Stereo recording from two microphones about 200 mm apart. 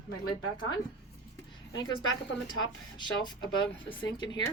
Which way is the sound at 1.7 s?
80° left.